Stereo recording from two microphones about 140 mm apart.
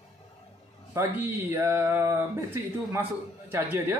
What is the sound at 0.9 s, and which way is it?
A man's voice, 20° right (ahead or behind).